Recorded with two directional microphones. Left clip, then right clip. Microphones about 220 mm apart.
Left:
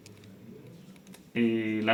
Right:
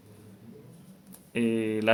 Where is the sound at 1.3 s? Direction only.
45° right (ahead or behind).